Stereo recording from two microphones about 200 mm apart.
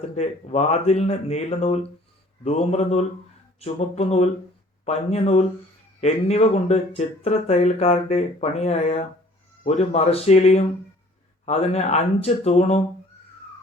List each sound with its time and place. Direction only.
0.2 s speech: 35° left (ahead or behind)